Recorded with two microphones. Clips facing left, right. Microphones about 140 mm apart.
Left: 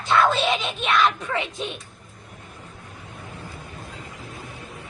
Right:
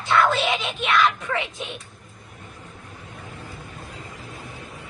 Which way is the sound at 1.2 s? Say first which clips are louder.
Even; 20° left (ahead or behind).